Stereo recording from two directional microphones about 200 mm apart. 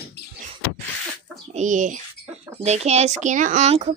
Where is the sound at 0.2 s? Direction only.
55° left (ahead or behind).